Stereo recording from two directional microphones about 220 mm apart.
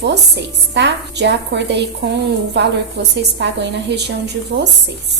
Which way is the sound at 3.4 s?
50° right (ahead or behind).